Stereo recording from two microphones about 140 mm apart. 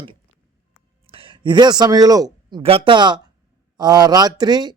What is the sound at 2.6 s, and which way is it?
Speech, 40° right (ahead or behind).